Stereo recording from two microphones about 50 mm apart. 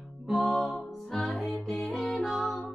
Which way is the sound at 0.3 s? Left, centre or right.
Centre.